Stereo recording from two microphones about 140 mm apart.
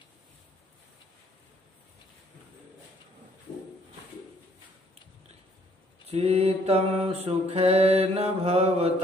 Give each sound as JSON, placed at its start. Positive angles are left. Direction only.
{"t": 6.0, "sound": "mantra", "side_deg": -45}